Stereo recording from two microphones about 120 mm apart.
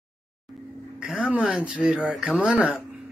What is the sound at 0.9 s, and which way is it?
Speech, 10° right (ahead or behind).